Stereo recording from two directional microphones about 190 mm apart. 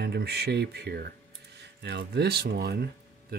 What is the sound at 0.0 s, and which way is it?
Speech, 60° right (ahead or behind).